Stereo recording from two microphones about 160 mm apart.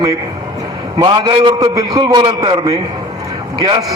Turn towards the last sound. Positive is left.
turn(degrees=-25)  # may be behind; listen again after turning